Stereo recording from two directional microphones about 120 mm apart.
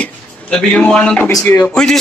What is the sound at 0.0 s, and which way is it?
A man's voice, 5° left (ahead or behind).